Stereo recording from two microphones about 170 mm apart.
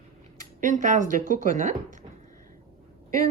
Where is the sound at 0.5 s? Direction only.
45° right (ahead or behind).